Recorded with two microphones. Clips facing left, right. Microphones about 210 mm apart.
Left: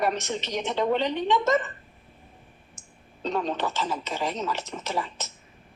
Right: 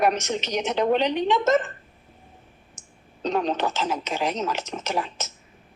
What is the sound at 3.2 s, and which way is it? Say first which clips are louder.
A woman's voice: right 3 dB; 75° right (ahead or behind).